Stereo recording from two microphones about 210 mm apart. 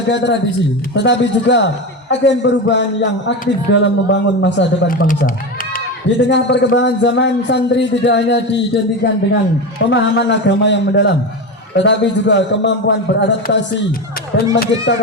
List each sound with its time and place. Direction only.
0.1 s a man's voice: 55° left (ahead or behind)
4.9 s speech: 40° left (ahead or behind)
6.1 s a man's voice: 55° left (ahead or behind)
9.9 s a man's voice: 55° left (ahead or behind)